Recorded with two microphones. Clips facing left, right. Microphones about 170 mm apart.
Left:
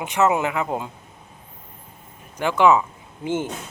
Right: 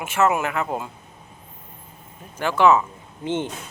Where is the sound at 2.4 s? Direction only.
15° left (ahead or behind).